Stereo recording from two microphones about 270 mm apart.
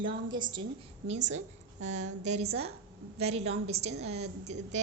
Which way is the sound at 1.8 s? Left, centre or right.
Right.